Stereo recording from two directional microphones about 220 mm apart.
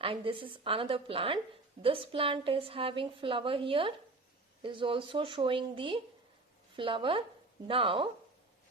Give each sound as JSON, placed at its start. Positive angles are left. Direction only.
{"t": 0.0, "sound": "a woman's voice", "side_deg": -25}